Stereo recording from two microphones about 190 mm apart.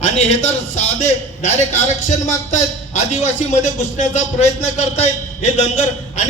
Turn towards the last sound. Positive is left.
turn(degrees=35)  # may be behind; listen again after turning